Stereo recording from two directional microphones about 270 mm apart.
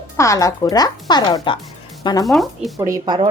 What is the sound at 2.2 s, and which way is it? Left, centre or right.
Speech, centre.